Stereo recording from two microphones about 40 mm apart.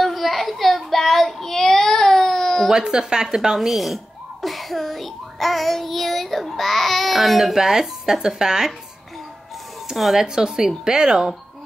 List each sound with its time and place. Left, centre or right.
0.0 s child singing: centre
2.7 s speech: centre
9.9 s speech: centre
10.2 s speech: centre